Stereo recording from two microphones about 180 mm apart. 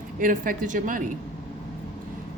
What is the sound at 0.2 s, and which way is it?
Speech, 50° right (ahead or behind).